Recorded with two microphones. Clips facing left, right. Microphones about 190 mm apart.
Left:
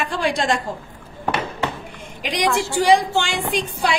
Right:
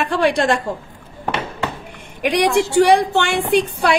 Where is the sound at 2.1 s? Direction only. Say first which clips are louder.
Right 5 dB; 60° right (ahead or behind).